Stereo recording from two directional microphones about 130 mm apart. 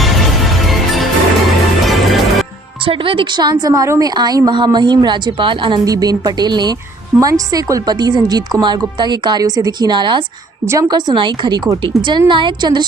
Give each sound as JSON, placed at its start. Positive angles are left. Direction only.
{"t": 1.9, "sound": "music", "side_deg": 0}
{"t": 2.9, "sound": "speech", "side_deg": -45}
{"t": 5.9, "sound": "speech", "side_deg": -30}